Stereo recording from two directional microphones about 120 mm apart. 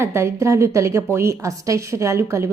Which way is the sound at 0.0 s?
20° right (ahead or behind).